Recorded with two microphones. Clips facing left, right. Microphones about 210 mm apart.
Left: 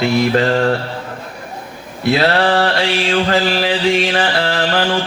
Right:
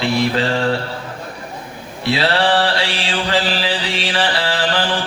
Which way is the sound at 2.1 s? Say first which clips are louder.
Left 2 dB; 45° left (ahead or behind).